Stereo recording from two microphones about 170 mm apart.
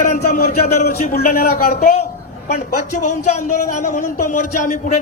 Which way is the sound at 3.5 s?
45° left (ahead or behind).